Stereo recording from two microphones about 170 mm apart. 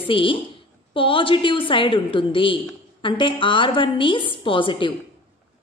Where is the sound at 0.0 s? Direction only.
30° left (ahead or behind).